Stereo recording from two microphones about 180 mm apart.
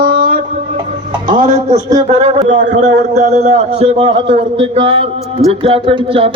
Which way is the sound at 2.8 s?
65° right (ahead or behind).